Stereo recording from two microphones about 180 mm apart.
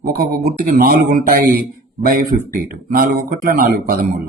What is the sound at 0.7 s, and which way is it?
Speech, 55° right (ahead or behind).